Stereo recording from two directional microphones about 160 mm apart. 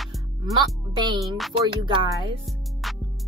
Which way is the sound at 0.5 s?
30° right (ahead or behind).